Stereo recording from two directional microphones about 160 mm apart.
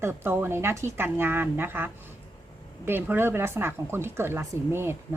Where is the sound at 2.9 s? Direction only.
15° right (ahead or behind).